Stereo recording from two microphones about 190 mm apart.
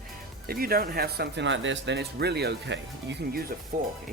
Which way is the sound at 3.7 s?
50° right (ahead or behind).